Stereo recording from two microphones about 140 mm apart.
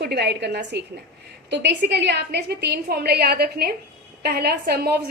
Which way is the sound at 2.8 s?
90° right.